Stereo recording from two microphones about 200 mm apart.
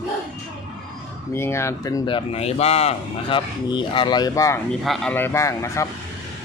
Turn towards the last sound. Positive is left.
turn(degrees=15)  # may be behind; listen again after turning